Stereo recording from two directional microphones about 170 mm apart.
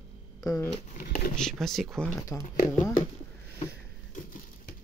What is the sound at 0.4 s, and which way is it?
Speech, 20° left (ahead or behind).